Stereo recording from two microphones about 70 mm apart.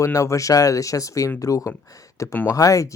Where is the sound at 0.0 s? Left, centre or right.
Left.